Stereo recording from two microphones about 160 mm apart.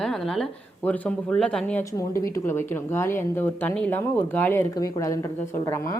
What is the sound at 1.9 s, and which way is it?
A woman's voice, 20° left (ahead or behind).